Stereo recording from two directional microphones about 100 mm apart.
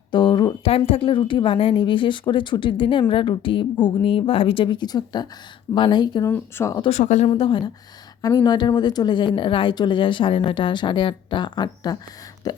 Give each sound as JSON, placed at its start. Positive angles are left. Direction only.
{"t": 0.1, "sound": "a sound", "side_deg": 50}
{"t": 0.9, "sound": "a woman's voice", "side_deg": 65}
{"t": 6.2, "sound": "speech", "side_deg": 25}
{"t": 7.3, "sound": "a woman's voice", "side_deg": 65}
{"t": 8.2, "sound": "speech", "side_deg": 45}
{"t": 12.4, "sound": "a sound", "side_deg": 40}